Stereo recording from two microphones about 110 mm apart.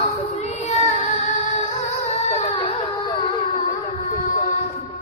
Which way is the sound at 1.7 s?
90° left.